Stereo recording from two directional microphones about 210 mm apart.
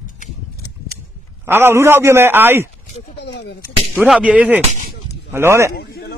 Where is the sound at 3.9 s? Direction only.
5° right (ahead or behind).